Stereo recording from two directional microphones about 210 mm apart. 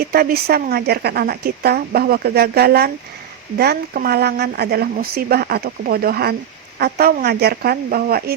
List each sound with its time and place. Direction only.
0.0 s a woman's voice: 45° right (ahead or behind)